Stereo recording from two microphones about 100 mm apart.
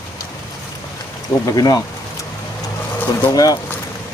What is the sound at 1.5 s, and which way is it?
Speech, 40° left (ahead or behind).